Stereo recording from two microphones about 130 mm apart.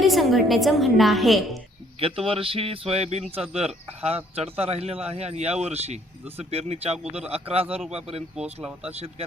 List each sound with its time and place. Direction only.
0.0 s a woman's voice: centre (ahead or behind)
2.0 s speech: 45° right (ahead or behind)
8.6 s speech: 10° right (ahead or behind)